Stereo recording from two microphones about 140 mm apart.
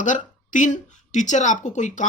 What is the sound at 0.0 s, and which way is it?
Speech, 65° left (ahead or behind).